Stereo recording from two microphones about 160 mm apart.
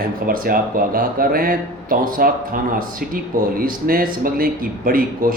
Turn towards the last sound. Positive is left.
turn(degrees=-60)  # may be behind; listen again after turning